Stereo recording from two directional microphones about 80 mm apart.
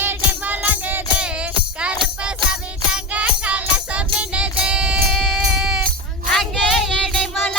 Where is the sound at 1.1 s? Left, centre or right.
Centre.